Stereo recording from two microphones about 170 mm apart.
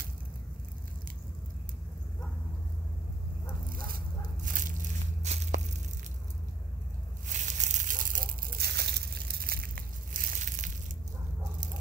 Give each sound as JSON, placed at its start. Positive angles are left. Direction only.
{"t": 3.7, "sound": "dog", "side_deg": -55}
{"t": 5.2, "sound": "tearing", "side_deg": -40}
{"t": 7.2, "sound": "a sound", "side_deg": -45}